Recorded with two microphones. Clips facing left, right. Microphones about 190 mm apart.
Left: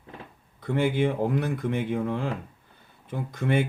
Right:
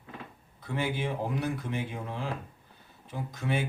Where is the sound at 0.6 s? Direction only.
55° left (ahead or behind).